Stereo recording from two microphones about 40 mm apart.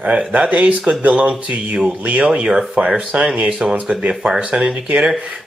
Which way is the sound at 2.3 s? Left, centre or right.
Right.